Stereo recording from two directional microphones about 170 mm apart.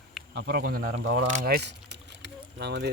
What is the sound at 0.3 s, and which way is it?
Speech, 70° right (ahead or behind).